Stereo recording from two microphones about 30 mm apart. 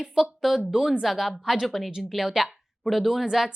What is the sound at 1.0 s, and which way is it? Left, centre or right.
A woman's voice, centre.